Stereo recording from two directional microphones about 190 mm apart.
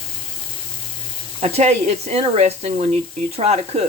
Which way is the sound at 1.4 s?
35° right (ahead or behind).